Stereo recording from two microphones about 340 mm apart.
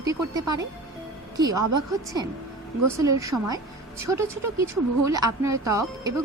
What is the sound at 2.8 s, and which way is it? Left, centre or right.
Speech, centre.